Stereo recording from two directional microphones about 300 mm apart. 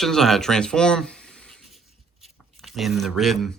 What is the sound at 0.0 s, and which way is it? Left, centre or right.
Speech, centre.